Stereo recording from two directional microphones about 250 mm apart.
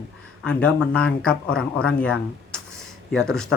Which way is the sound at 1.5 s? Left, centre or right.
Left.